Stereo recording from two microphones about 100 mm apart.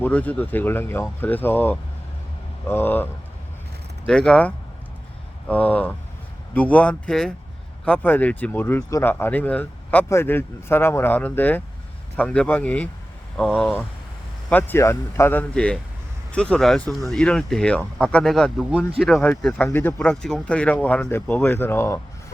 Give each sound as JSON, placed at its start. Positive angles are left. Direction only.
{"t": 0.0, "sound": "speech", "side_deg": 15}
{"t": 4.0, "sound": "speech", "side_deg": 10}
{"t": 14.5, "sound": "speech", "side_deg": 25}
{"t": 15.5, "sound": "speech", "side_deg": 10}
{"t": 19.5, "sound": "speech", "side_deg": 20}
{"t": 20.0, "sound": "speech", "side_deg": 5}